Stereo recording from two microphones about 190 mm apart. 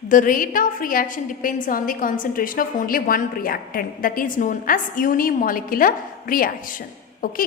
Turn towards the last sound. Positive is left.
turn(degrees=45)  # may be behind; listen again after turning